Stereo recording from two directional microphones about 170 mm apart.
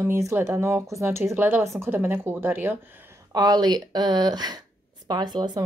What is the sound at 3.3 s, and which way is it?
Speech, 25° right (ahead or behind).